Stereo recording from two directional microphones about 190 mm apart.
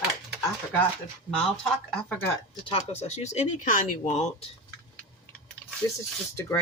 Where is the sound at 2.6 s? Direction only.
30° left (ahead or behind).